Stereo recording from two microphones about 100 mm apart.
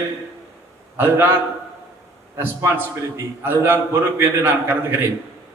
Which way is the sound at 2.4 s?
20° right (ahead or behind).